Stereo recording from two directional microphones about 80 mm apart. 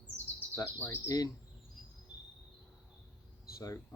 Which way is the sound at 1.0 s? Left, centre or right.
Left.